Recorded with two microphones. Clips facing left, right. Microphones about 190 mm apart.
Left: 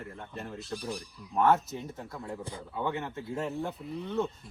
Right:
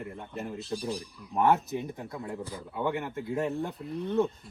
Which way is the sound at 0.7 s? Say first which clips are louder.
Right 3 dB; 25° right (ahead or behind).